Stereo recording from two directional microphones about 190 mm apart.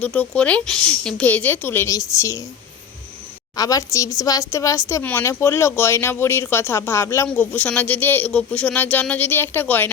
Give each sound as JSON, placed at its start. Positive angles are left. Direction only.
{"t": 0.0, "sound": "speech", "side_deg": 5}
{"t": 3.5, "sound": "speech", "side_deg": 20}